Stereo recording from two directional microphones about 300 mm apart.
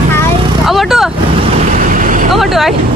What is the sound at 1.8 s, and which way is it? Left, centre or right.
Boat, right.